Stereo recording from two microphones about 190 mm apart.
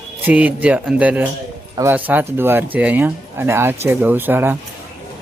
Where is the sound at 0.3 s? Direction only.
10° right (ahead or behind).